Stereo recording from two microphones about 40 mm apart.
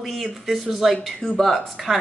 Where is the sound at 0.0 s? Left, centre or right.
Centre.